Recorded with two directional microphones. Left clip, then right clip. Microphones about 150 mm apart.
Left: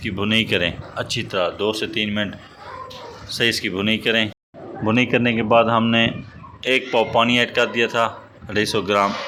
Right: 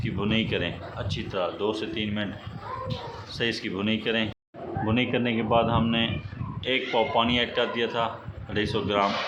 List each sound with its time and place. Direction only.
0.0 s a man's voice: 30° left (ahead or behind)